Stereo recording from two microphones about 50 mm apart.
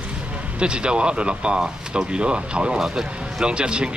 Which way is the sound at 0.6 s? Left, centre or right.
Centre.